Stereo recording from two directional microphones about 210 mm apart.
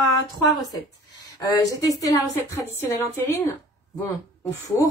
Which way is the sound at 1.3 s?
20° left (ahead or behind).